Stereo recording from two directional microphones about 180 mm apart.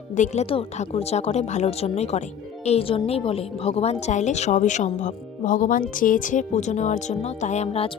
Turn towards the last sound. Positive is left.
turn(degrees=35)  # may be behind; listen again after turning